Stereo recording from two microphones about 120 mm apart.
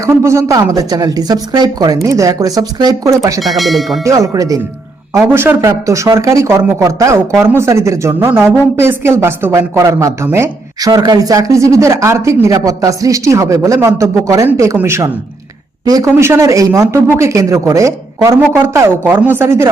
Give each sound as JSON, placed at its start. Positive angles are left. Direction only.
{"t": 0.0, "sound": "speech", "side_deg": -25}
{"t": 3.4, "sound": "speech", "side_deg": 0}
{"t": 4.0, "sound": "speech", "side_deg": -25}